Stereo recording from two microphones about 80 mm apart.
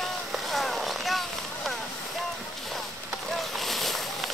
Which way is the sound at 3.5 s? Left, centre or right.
Centre.